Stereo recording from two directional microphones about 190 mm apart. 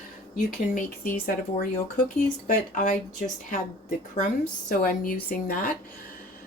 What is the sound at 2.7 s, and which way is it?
Speech, 45° left (ahead or behind).